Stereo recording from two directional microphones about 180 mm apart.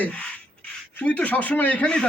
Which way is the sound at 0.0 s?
5° left (ahead or behind).